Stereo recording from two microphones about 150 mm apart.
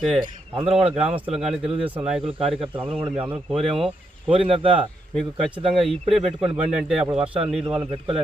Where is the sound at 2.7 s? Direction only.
35° right (ahead or behind).